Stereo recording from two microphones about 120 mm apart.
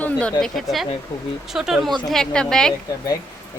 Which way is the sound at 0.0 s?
10° left (ahead or behind).